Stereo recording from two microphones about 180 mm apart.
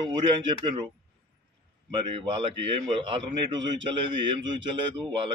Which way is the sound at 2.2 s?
25° right (ahead or behind).